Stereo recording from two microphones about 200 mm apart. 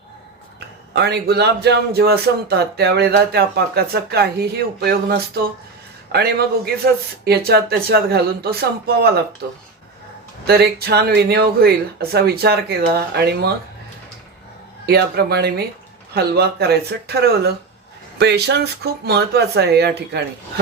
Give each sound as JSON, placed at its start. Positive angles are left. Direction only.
{"t": 0.9, "sound": "a man's voice", "side_deg": -55}
{"t": 10.4, "sound": "a man's voice", "side_deg": -55}
{"t": 14.8, "sound": "a man's voice", "side_deg": -55}